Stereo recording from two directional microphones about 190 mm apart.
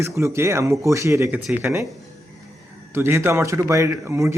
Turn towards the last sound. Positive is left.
turn(degrees=-15)  # may be behind; listen again after turning